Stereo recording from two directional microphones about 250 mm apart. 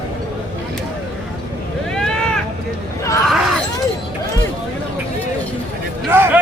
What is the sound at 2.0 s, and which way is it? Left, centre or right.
Boat, centre.